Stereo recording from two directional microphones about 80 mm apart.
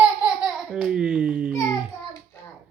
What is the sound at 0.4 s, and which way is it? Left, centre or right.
Babbling, centre.